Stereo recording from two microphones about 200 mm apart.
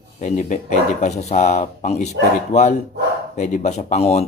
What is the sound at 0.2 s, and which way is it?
Speech, 35° left (ahead or behind).